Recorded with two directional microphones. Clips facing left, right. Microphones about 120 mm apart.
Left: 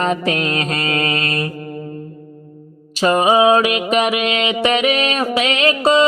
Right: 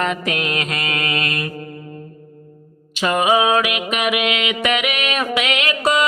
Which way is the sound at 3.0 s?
30° left (ahead or behind).